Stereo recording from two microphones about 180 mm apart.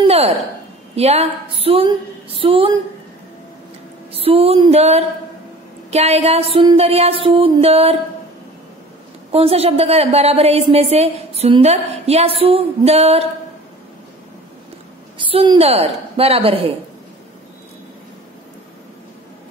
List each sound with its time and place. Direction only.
0.0 s a sound: 35° right (ahead or behind)
0.9 s a woman's voice: 35° right (ahead or behind)
4.1 s a woman's voice: 30° right (ahead or behind)
9.3 s a woman's voice: 35° right (ahead or behind)
15.1 s a woman's voice: 30° right (ahead or behind)